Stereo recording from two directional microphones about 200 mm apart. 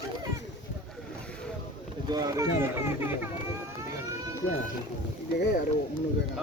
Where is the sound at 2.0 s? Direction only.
20° right (ahead or behind).